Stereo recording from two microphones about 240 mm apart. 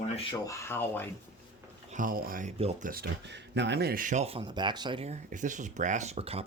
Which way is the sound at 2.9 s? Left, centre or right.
Right.